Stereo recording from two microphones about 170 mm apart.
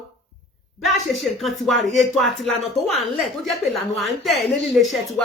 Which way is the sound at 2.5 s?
35° left (ahead or behind).